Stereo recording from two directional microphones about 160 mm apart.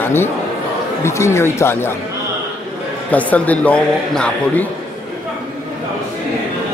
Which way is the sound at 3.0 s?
10° left (ahead or behind).